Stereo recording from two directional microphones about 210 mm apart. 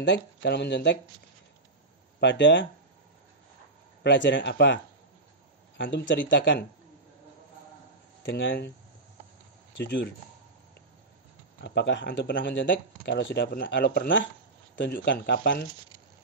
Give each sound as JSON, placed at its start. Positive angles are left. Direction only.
{"t": 0.0, "sound": "speech", "side_deg": 55}
{"t": 2.1, "sound": "speech", "side_deg": 55}
{"t": 4.0, "sound": "speech", "side_deg": 55}
{"t": 5.8, "sound": "speech", "side_deg": 55}
{"t": 8.3, "sound": "speech", "side_deg": 60}
{"t": 9.8, "sound": "speech", "side_deg": 55}
{"t": 11.6, "sound": "speech", "side_deg": 55}